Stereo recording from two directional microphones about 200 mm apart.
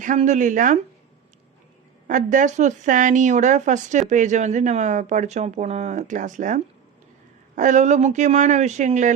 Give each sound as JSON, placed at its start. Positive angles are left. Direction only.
{"t": 0.0, "sound": "speech", "side_deg": -40}
{"t": 2.0, "sound": "speech", "side_deg": -40}